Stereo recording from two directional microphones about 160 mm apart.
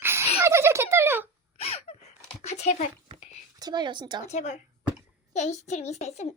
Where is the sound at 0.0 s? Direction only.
15° right (ahead or behind).